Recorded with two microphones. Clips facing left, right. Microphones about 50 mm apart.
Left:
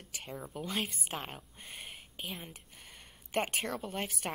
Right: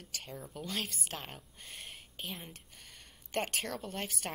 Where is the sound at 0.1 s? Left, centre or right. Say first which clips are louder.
Left 3 dB; centre.